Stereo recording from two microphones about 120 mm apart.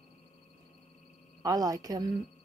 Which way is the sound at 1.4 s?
30° right (ahead or behind).